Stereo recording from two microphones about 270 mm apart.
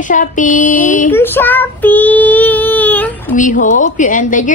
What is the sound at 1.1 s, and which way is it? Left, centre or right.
Child singing, centre.